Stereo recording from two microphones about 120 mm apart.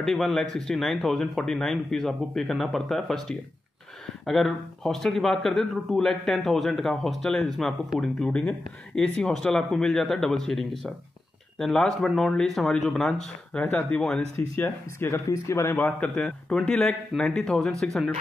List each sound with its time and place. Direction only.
0.0 s speech: centre (ahead or behind)
14.6 s speech: 20° left (ahead or behind); by 18.1 s centre (ahead or behind)